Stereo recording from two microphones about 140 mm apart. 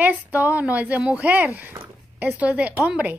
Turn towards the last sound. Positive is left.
turn(degrees=-10)  # may be behind; listen again after turning